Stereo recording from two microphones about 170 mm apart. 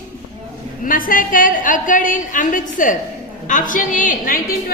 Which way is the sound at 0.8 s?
55° left (ahead or behind).